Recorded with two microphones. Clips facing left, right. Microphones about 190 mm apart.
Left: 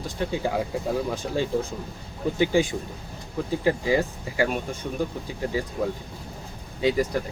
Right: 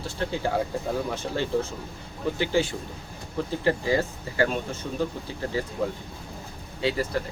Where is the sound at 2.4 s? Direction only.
15° left (ahead or behind).